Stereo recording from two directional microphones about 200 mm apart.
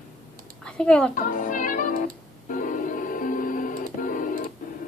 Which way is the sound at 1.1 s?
40° left (ahead or behind).